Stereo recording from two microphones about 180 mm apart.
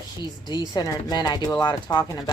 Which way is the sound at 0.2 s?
25° left (ahead or behind).